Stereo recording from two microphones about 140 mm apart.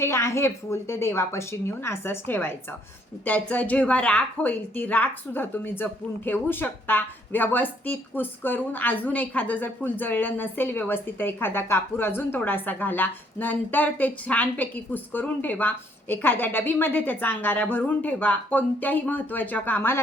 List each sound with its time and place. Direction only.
0.0 s a woman's voice: 20° left (ahead or behind)